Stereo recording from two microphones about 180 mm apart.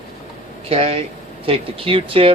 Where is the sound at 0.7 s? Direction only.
35° right (ahead or behind).